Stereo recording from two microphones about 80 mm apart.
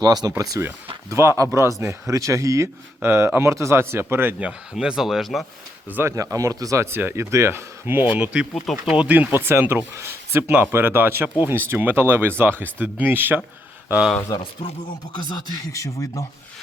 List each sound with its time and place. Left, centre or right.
0.0 s speech: right
1.1 s speech: right
3.0 s speech: right
4.4 s speech: centre
5.9 s speech: right
6.1 s speech: right
6.9 s speech: right
8.1 s speech: centre
8.5 s speech: centre
8.9 s speech: centre
15.7 s speech: left